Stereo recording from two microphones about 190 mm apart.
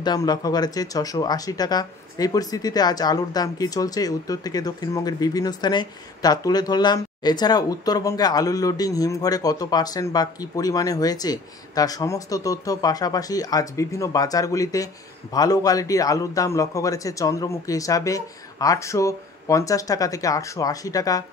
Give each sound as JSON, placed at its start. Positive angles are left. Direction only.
{"t": 0.0, "sound": "a man's voice", "side_deg": 20}